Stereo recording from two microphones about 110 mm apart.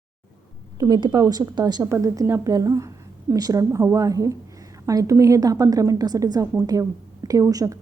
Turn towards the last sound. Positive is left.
turn(degrees=-30)  # may be behind; listen again after turning